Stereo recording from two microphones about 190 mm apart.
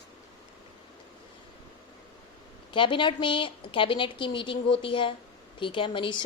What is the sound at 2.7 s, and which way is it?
A woman's voice, 25° left (ahead or behind).